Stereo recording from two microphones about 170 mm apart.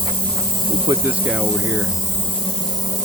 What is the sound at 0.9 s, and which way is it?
Speech, 20° right (ahead or behind).